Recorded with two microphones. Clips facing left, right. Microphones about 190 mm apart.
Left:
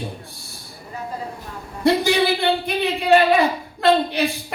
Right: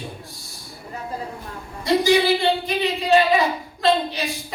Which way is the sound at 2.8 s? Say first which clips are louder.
Left 3 dB; 60° left (ahead or behind).